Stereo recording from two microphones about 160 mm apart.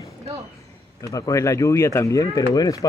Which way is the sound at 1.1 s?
20° left (ahead or behind).